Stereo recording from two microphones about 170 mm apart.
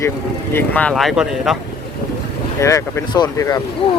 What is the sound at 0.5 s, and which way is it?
Speech, 10° left (ahead or behind).